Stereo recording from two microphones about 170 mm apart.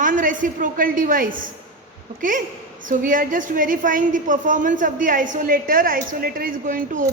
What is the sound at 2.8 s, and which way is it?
A woman's voice, 50° right (ahead or behind).